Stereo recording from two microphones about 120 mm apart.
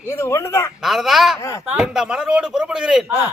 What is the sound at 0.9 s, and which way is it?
Speech, centre (ahead or behind).